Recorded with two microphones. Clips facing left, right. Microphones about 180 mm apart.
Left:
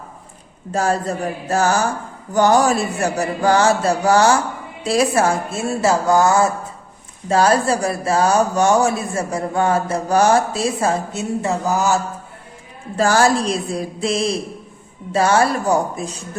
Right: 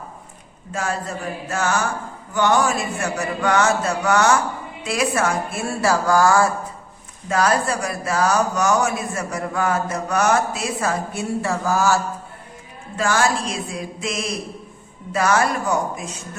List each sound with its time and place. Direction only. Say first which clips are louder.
0.7 s speech: left 6 dB; 35° left (ahead or behind); by 11.9 s 20° left (ahead or behind)
13.0 s speech: left 5 dB; 35° left (ahead or behind)